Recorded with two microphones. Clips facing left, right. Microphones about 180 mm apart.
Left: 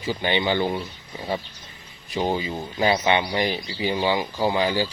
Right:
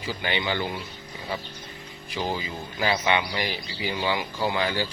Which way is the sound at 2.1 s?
25° left (ahead or behind).